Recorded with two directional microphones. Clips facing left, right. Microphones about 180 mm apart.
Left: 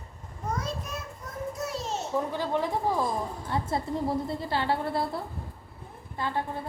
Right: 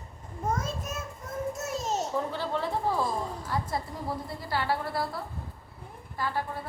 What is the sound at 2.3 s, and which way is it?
Speech, 15° left (ahead or behind).